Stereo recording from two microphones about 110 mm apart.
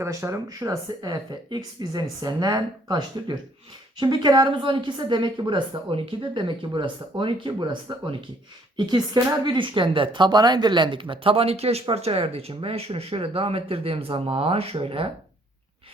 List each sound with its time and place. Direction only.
0.0 s speech: 25° right (ahead or behind)
1.5 s a woman's voice: 40° right (ahead or behind); by 15.1 s 55° right (ahead or behind)